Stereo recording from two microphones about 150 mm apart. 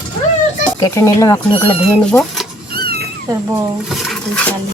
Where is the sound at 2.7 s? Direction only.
90° right.